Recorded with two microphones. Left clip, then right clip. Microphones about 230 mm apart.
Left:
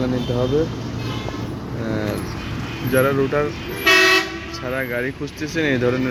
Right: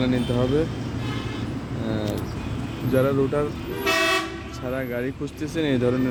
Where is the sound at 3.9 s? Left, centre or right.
Right.